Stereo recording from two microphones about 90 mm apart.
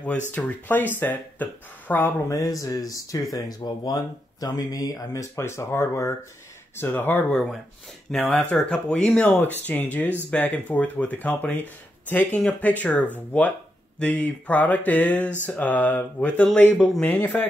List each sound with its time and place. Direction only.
0.0 s speech: 15° left (ahead or behind)
2.2 s speech: 40° left (ahead or behind); by 7.2 s 20° left (ahead or behind)
8.1 s speech: 5° left (ahead or behind); by 17.5 s 20° left (ahead or behind)